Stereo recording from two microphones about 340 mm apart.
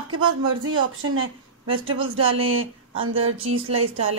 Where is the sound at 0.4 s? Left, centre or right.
Right.